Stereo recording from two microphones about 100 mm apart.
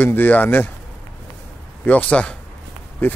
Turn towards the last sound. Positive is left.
turn(degrees=20)  # may be behind; listen again after turning